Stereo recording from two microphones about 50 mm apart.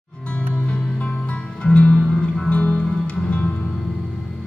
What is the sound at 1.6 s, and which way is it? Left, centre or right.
Music, left.